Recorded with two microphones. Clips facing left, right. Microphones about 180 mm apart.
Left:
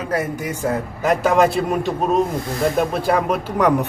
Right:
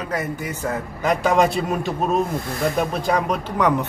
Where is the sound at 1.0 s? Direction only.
5° left (ahead or behind).